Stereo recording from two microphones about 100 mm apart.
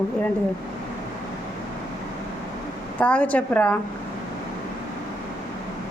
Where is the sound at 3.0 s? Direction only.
15° left (ahead or behind).